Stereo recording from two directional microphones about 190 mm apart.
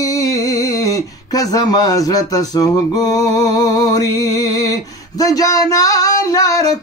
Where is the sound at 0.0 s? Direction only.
20° left (ahead or behind).